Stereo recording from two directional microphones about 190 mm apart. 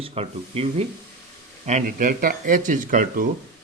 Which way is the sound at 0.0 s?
30° right (ahead or behind).